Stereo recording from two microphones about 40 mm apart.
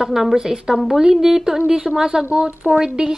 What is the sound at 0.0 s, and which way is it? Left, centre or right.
Speech, centre.